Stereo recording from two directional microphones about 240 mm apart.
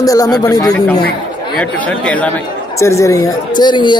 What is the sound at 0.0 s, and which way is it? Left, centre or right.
Speech, centre.